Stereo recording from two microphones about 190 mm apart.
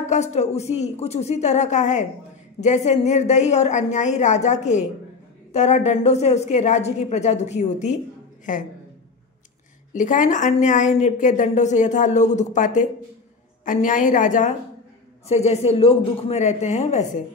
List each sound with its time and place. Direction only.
0.0 s a woman's voice: 35° left (ahead or behind)
9.9 s a woman's voice: 45° left (ahead or behind)